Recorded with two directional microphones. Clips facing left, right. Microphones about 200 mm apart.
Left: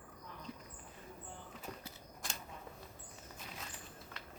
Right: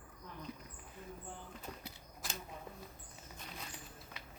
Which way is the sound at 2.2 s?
Centre (ahead or behind).